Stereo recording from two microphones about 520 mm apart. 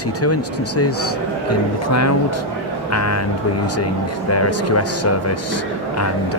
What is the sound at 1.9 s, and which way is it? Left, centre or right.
Speech, left.